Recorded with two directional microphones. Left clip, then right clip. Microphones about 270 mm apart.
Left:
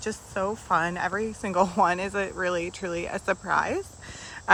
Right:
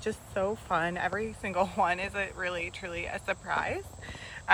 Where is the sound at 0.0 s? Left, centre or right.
Centre.